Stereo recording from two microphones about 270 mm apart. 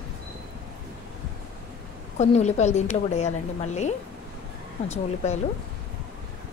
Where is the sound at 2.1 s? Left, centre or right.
Left.